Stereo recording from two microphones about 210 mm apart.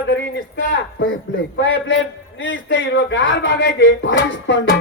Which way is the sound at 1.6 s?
60° left (ahead or behind).